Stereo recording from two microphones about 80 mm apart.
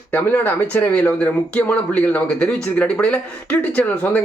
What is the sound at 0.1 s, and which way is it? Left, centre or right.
Speech, left.